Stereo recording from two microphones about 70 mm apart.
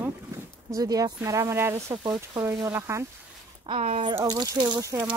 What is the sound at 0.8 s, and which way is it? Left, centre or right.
Speech, right.